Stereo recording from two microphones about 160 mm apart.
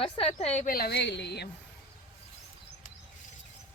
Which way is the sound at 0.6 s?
70° left (ahead or behind).